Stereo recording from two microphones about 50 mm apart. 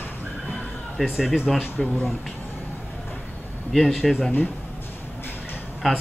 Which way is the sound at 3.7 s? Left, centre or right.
Centre.